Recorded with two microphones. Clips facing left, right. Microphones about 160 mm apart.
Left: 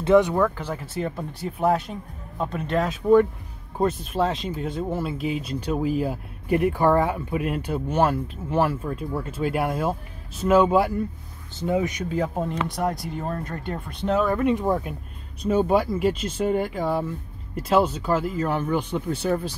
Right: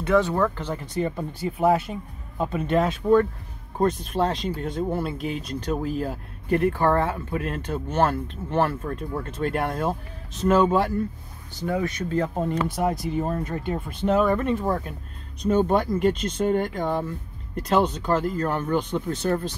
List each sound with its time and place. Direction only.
0.0 s speech: 20° left (ahead or behind)
11.5 s speech: 20° left (ahead or behind); by 14.4 s centre (ahead or behind)
14.4 s speech: 15° left (ahead or behind)